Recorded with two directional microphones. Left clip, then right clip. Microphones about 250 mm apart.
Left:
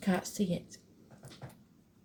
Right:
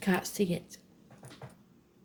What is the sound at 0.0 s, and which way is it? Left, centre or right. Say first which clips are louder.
Speech: right 3 dB; right.